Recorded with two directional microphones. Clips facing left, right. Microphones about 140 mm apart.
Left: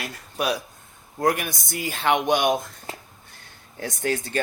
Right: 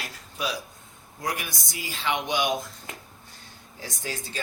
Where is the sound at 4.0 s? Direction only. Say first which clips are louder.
Left 10 dB; 55° left (ahead or behind).